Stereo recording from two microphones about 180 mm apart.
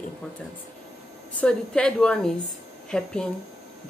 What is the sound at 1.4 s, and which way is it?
Speech, 5° left (ahead or behind).